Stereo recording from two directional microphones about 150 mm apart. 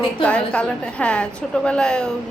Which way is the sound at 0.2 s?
10° left (ahead or behind).